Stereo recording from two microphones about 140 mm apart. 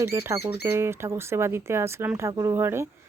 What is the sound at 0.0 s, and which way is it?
Speech, 20° right (ahead or behind).